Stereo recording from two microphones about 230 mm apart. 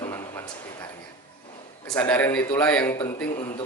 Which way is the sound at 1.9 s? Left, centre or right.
Centre.